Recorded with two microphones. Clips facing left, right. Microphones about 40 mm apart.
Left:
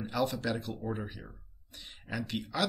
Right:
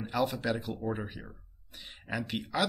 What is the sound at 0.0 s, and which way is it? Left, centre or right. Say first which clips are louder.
Speech: right 1 dB; centre.